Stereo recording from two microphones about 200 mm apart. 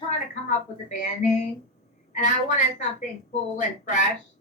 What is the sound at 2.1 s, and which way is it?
Speech, 40° left (ahead or behind).